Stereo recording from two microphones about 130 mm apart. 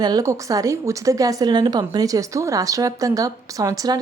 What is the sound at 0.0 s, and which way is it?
Speech, 30° right (ahead or behind).